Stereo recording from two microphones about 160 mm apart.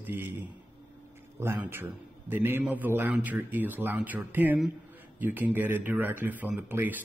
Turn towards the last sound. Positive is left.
turn(degrees=-10)  # may be behind; listen again after turning